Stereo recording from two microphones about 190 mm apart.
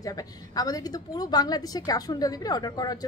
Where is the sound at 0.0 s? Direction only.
20° left (ahead or behind).